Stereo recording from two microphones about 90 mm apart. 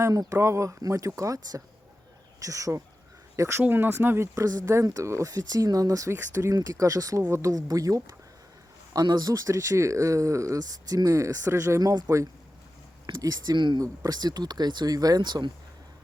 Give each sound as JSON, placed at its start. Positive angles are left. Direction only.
{"t": 0.0, "sound": "speech", "side_deg": -40}
{"t": 13.1, "sound": "speech", "side_deg": -50}
{"t": 13.8, "sound": "speech", "side_deg": -45}